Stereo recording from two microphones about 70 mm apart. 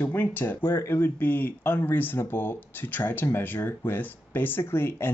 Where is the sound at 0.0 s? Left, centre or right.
Left.